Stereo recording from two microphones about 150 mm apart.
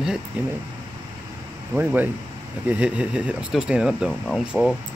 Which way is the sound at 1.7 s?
10° right (ahead or behind).